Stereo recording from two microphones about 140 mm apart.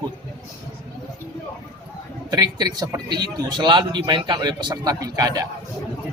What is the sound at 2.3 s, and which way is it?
Speech, 30° right (ahead or behind).